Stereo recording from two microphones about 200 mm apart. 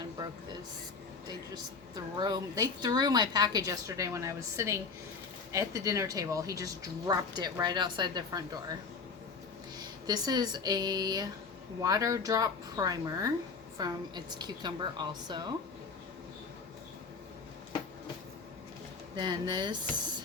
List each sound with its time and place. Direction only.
2.1 s a woman's voice: 20° right (ahead or behind)
9.7 s a woman's voice: 20° right (ahead or behind)
19.1 s a woman's voice: 20° right (ahead or behind)